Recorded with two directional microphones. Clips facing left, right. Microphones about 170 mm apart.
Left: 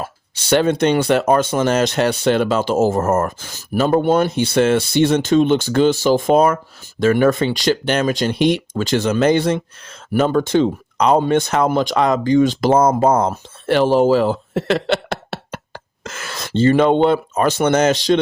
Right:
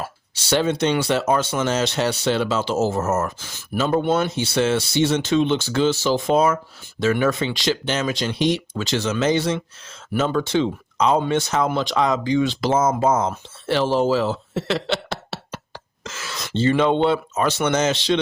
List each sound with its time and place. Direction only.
0.3 s speech: 55° left (ahead or behind)
13.7 s a sound: 55° left (ahead or behind)
16.5 s speech: 50° left (ahead or behind)